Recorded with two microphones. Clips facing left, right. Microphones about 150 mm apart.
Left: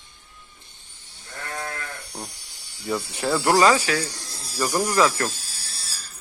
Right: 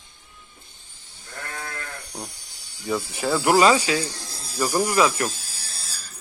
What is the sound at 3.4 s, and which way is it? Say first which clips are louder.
Speech: right 1 dB; 15° right (ahead or behind).